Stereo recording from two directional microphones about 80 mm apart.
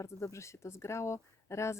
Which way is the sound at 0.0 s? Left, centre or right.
Left.